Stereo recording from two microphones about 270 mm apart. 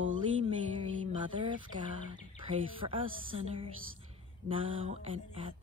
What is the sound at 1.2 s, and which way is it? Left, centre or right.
Speech, centre.